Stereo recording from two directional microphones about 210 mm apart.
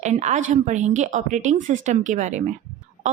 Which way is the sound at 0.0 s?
35° right (ahead or behind).